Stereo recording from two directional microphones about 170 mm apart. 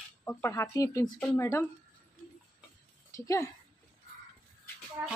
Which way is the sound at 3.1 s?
20° left (ahead or behind).